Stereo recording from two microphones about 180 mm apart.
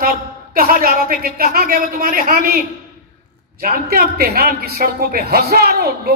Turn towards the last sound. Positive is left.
turn(degrees=-60)  # may be behind; listen again after turning